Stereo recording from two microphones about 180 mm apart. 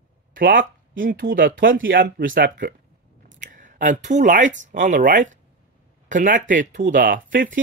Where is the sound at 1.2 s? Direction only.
90° right.